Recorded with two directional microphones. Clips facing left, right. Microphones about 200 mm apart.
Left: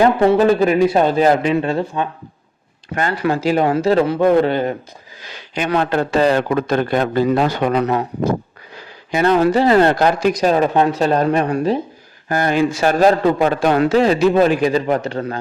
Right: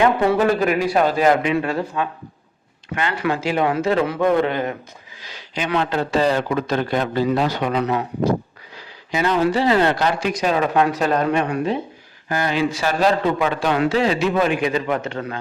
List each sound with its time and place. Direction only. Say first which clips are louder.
0.0 s speech: left 4 dB; 30° left (ahead or behind)
2.9 s speech: left 3 dB; 40° left (ahead or behind)
5.2 s a man's voice: left 4 dB; 55° left (ahead or behind); by 11.8 s 35° left (ahead or behind)
12.3 s a man's voice: left 4 dB; 50° left (ahead or behind)